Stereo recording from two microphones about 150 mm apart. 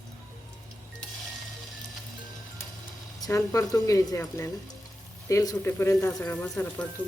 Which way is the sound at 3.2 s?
20° left (ahead or behind).